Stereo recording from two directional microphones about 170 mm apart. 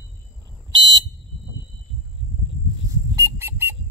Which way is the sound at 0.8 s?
25° right (ahead or behind).